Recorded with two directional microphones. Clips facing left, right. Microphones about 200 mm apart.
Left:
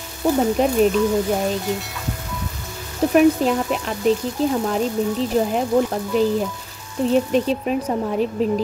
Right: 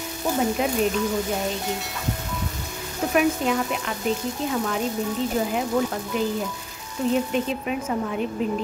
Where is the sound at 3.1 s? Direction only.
35° left (ahead or behind).